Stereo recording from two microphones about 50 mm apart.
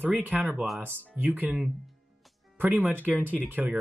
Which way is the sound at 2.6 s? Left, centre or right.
Right.